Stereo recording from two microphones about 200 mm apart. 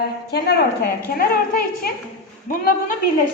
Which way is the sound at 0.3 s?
50° left (ahead or behind).